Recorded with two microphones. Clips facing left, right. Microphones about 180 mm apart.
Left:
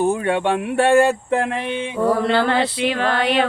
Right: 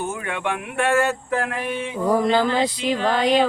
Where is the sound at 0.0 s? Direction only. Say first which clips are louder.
Left 8 dB; 35° left (ahead or behind).